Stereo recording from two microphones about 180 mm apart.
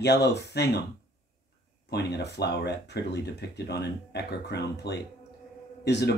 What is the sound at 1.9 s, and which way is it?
Speech, 65° left (ahead or behind).